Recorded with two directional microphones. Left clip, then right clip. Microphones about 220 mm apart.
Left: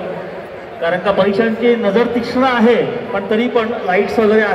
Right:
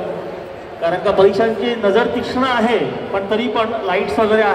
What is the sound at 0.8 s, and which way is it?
A man's voice, 55° right (ahead or behind).